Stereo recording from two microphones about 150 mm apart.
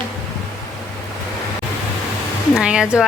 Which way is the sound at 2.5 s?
5° right (ahead or behind).